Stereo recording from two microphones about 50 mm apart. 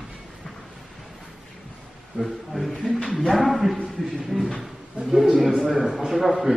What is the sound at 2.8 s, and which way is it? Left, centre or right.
Speech, centre.